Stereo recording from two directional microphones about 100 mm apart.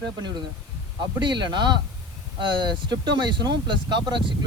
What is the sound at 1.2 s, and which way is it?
Speech, 50° right (ahead or behind).